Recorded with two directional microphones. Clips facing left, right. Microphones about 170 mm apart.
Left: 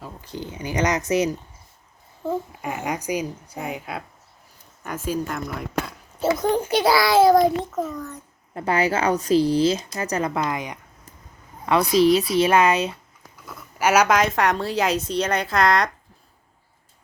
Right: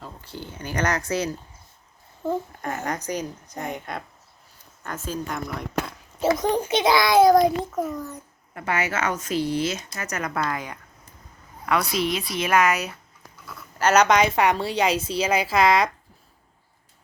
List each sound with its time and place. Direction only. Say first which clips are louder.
0.0 s speech: left 4 dB; 15° left (ahead or behind)
2.2 s a woman's voice: even; 5° left (ahead or behind)
8.5 s speech: left 5 dB; 35° left (ahead or behind)
11.6 s speech: left 7 dB; 30° left (ahead or behind)
13.7 s a woman's voice: even; 10° left (ahead or behind)